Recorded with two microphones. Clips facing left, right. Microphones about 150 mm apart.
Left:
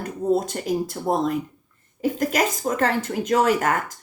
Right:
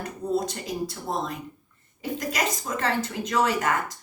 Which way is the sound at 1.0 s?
50° left (ahead or behind).